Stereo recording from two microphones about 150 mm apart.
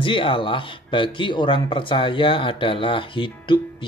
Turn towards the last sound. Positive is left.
turn(degrees=35)  # may be behind; listen again after turning